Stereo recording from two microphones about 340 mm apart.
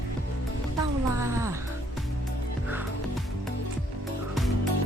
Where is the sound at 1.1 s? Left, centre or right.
Centre.